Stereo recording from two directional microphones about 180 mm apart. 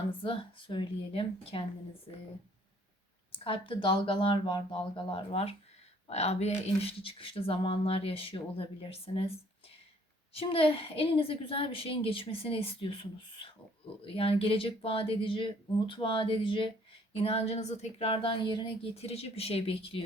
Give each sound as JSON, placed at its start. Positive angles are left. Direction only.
{"t": 0.1, "sound": "speech", "side_deg": 30}
{"t": 3.3, "sound": "speech", "side_deg": 30}